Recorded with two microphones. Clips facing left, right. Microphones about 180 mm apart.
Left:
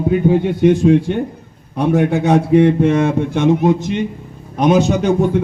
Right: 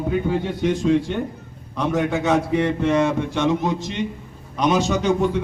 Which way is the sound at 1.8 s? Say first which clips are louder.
Left 6 dB; 55° left (ahead or behind).